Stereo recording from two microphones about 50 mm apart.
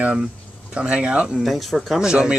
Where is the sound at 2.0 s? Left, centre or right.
Centre.